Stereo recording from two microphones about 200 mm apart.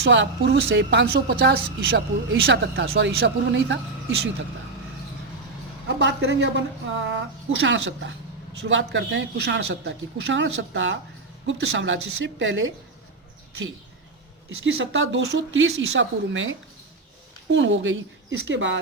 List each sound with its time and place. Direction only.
0.0 s a woman's voice: 60° right (ahead or behind)
6.0 s a woman's voice: 60° right (ahead or behind)
14.6 s speech: 70° right (ahead or behind)